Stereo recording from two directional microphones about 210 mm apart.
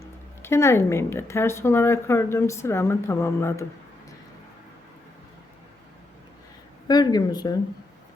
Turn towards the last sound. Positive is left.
turn(degrees=20)  # may be behind; listen again after turning